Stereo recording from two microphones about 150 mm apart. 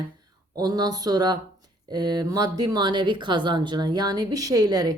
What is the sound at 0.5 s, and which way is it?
A woman's voice, 25° right (ahead or behind).